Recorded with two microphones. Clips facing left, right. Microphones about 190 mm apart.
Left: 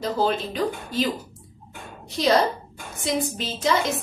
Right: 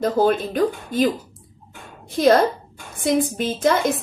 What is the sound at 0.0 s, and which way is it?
A woman's voice, 55° right (ahead or behind).